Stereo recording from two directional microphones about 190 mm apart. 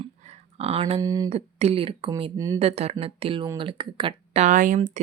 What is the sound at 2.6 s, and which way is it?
Speech, 35° right (ahead or behind).